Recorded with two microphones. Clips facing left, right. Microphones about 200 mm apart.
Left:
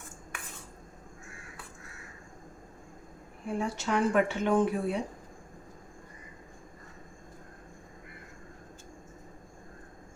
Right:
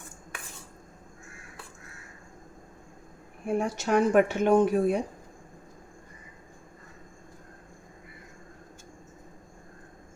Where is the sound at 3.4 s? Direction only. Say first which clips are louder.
Right 4 dB; 45° right (ahead or behind).